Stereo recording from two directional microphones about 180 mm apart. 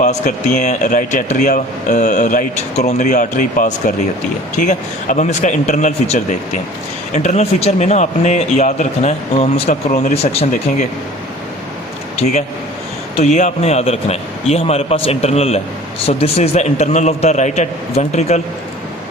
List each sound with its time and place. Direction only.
0.0 s speech: 40° left (ahead or behind)
13.1 s speech: 40° left (ahead or behind)